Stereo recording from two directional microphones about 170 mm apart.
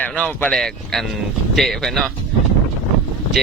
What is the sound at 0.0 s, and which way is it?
Speech, 10° left (ahead or behind).